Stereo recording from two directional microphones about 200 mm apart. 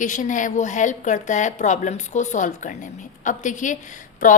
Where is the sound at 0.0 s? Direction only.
40° left (ahead or behind).